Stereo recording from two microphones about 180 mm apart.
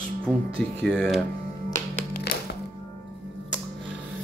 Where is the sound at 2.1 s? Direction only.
60° left (ahead or behind).